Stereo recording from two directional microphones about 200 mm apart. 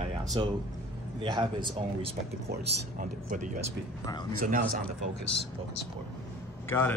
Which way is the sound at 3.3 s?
40° right (ahead or behind).